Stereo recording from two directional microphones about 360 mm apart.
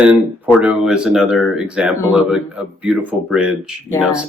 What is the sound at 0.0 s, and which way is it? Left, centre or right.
Speech, centre.